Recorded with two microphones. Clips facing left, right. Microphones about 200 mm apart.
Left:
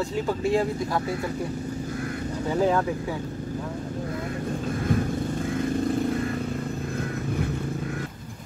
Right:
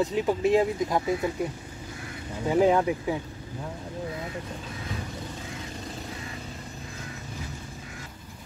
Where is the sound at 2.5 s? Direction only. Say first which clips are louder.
Right 2 dB; 15° right (ahead or behind).